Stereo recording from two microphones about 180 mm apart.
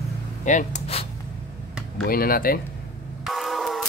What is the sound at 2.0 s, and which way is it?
Speech, 55° left (ahead or behind).